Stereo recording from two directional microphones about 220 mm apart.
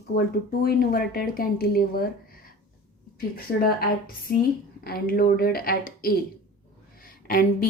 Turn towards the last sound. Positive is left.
turn(degrees=40)  # may be behind; listen again after turning